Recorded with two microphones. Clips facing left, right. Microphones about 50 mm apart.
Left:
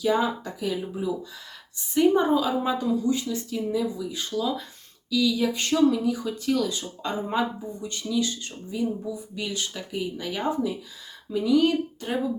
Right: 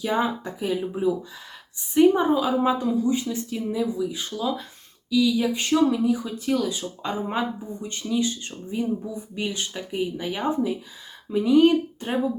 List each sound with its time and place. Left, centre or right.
0.0 s speech: right
2.0 s speech: centre
7.8 s speech: right